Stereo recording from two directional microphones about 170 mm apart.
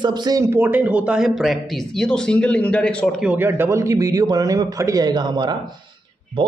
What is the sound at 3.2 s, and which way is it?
A man's voice, 10° right (ahead or behind).